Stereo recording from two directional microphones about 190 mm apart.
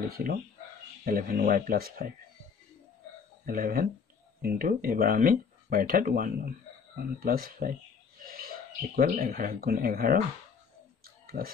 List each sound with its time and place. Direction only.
0.1 s speech: 50° right (ahead or behind)
3.4 s speech: 50° right (ahead or behind)
11.2 s speech: 50° right (ahead or behind)